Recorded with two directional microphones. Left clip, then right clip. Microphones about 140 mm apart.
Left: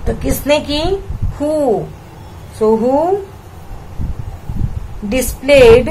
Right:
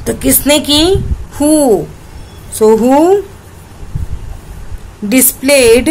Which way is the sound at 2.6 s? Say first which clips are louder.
Right 5 dB; 65° right (ahead or behind).